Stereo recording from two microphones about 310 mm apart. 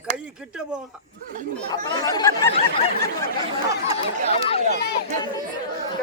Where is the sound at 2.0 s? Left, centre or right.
Centre.